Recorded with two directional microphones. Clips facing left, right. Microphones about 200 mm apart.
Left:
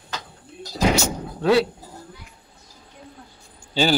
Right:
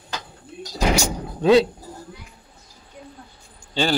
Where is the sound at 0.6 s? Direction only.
15° right (ahead or behind).